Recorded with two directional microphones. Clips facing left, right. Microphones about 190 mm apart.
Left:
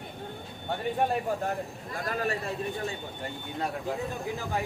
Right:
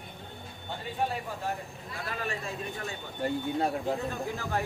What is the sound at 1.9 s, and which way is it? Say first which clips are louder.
Speech: left 5 dB; 40° left (ahead or behind).